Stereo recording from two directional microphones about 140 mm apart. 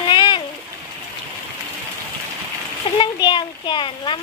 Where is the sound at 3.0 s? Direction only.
35° left (ahead or behind).